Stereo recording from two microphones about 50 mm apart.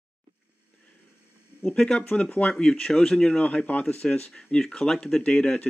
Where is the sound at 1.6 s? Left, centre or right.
Centre.